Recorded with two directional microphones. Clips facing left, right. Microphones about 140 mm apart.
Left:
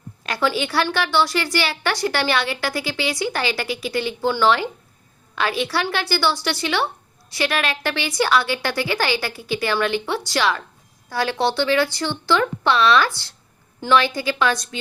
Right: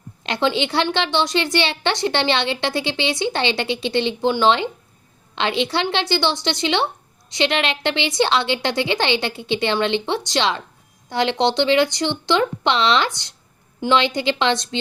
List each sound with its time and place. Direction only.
0.2 s a woman's voice: 25° right (ahead or behind)